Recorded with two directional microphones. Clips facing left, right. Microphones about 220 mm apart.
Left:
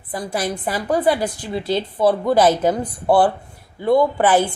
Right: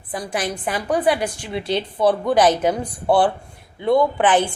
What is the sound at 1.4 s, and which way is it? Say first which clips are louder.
Speech: left 1 dB; 20° right (ahead or behind).